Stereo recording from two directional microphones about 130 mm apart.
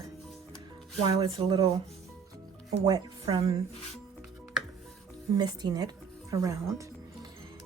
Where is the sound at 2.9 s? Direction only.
30° right (ahead or behind).